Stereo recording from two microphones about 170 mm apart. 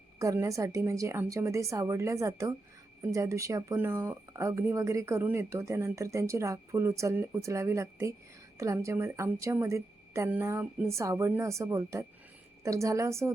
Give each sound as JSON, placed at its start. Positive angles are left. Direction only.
{"t": 0.2, "sound": "speech", "side_deg": -20}